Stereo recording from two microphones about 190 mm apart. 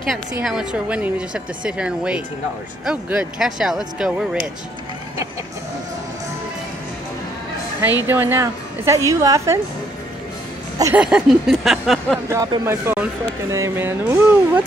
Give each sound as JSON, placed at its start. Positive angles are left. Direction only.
{"t": 0.0, "sound": "speech", "side_deg": 0}
{"t": 8.1, "sound": "a woman's voice", "side_deg": -10}
{"t": 11.0, "sound": "speech", "side_deg": -5}
{"t": 12.3, "sound": "a woman's voice", "side_deg": -15}